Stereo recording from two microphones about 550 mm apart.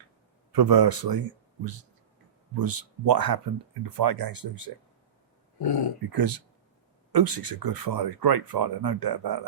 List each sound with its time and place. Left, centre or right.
0.5 s speech: right
2.6 s speech: right
5.6 s speech: left
6.1 s speech: right